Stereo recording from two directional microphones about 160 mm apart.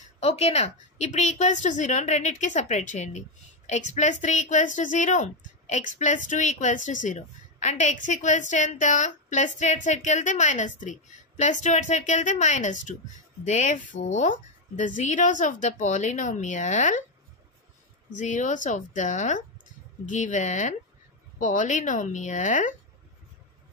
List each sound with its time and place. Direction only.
0.2 s a woman's voice: 40° left (ahead or behind)
18.1 s a woman's voice: 50° left (ahead or behind)